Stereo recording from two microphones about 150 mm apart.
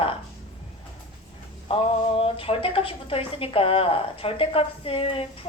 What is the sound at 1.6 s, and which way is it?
A woman's voice, 40° left (ahead or behind).